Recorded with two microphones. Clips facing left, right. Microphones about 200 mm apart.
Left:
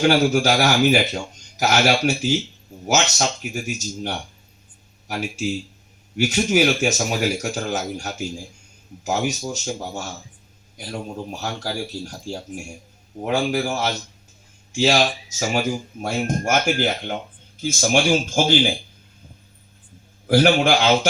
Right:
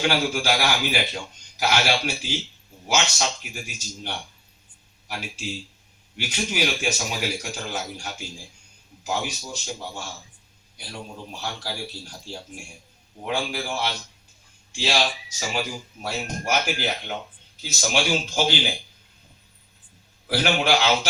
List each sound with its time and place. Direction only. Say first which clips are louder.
0.0 s speech: left 7 dB; 45° left (ahead or behind)
20.2 s speech: left 7 dB; 50° left (ahead or behind)